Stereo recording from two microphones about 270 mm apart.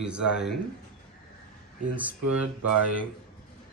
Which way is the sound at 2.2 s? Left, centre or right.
Right.